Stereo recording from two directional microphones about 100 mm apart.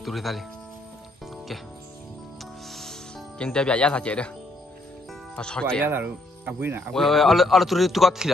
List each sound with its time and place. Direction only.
0.0 s a man's voice: centre (ahead or behind)
2.7 s music: 5° left (ahead or behind)
5.3 s speech: 10° left (ahead or behind)
5.9 s speech: 20° right (ahead or behind)
6.9 s a man's voice: centre (ahead or behind)